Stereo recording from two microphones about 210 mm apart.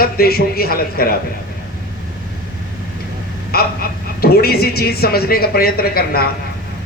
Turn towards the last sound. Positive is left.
turn(degrees=45)  # may be behind; listen again after turning